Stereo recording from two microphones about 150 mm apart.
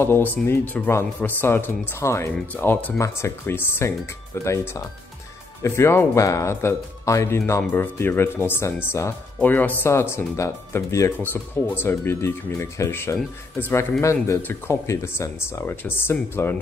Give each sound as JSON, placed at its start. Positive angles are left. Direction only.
{"t": 0.0, "sound": "speech", "side_deg": 15}